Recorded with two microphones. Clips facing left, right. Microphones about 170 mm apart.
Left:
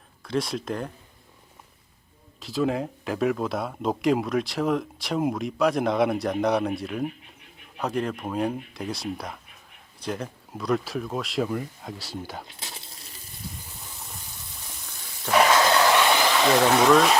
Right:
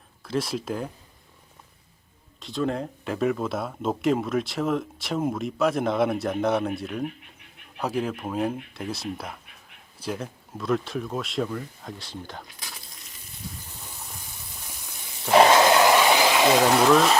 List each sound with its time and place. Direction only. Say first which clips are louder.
0.3 s speech: even; centre (ahead or behind)
2.4 s speech: left 2 dB; centre (ahead or behind)
11.4 s speech: left 3 dB; 15° left (ahead or behind)
11.9 s speech: left 2 dB; 5° left (ahead or behind)
12.5 s a sound: left 2 dB; 25° left (ahead or behind)
15.3 s a sound: right 3 dB; 25° right (ahead or behind); by 17.2 s centre (ahead or behind)